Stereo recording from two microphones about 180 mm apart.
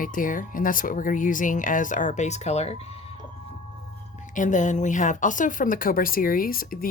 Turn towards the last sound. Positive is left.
turn(degrees=55)  # may be behind; listen again after turning